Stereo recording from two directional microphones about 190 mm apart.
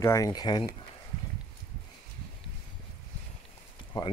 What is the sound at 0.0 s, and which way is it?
Speech, 15° left (ahead or behind).